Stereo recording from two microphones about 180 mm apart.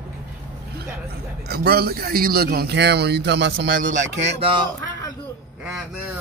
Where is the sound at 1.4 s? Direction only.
60° right (ahead or behind); by 3.8 s 85° right.